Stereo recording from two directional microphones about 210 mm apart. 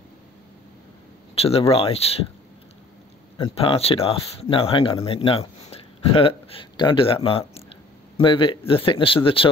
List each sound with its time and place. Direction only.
1.3 s speech: 30° left (ahead or behind)
3.3 s speech: 25° left (ahead or behind)